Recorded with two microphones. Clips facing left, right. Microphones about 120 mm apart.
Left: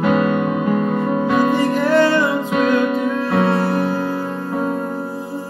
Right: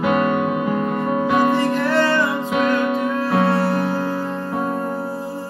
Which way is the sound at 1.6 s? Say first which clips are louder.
Left 3 dB; 15° left (ahead or behind).